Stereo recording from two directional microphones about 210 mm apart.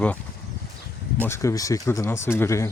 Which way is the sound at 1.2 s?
15° left (ahead or behind).